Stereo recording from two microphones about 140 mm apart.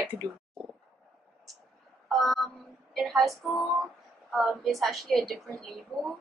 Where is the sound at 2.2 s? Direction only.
Centre (ahead or behind).